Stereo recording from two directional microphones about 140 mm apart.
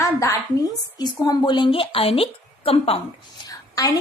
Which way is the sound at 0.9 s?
30° left (ahead or behind).